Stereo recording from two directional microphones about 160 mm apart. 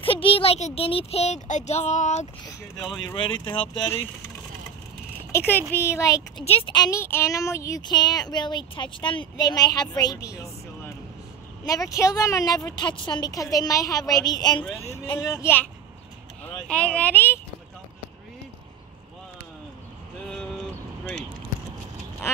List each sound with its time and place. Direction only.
0.0 s speech: 35° left (ahead or behind)
3.2 s speech: 30° left (ahead or behind)
5.3 s speech: 15° left (ahead or behind)
6.4 s speech: 35° left (ahead or behind); by 10.5 s 20° left (ahead or behind)
11.6 s speech: 20° left (ahead or behind)
14.6 s speech: 10° left (ahead or behind)